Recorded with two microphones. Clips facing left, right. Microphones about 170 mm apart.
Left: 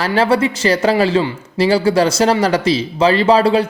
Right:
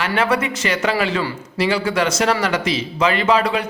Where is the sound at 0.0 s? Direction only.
30° left (ahead or behind).